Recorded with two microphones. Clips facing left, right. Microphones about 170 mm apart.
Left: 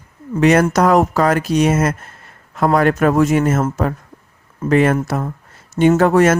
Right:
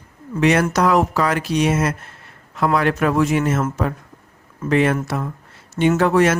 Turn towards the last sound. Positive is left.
turn(degrees=45)  # may be behind; listen again after turning